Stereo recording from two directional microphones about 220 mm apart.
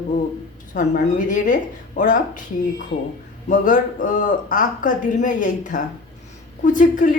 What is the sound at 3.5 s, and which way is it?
Speech, 40° left (ahead or behind).